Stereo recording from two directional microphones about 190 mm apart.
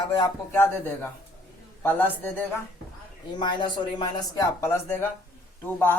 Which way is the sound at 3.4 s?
25° left (ahead or behind).